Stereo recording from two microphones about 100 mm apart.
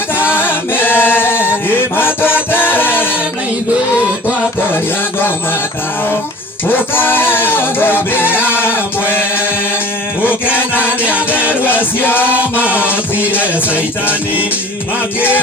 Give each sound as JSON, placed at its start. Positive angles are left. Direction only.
{"t": 0.3, "sound": "chant", "side_deg": 20}
{"t": 6.7, "sound": "music", "side_deg": 20}
{"t": 10.2, "sound": "chant", "side_deg": 20}
{"t": 11.6, "sound": "music", "side_deg": 20}
{"t": 12.3, "sound": "music", "side_deg": -15}